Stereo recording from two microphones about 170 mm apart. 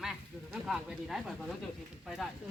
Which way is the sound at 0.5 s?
5° right (ahead or behind).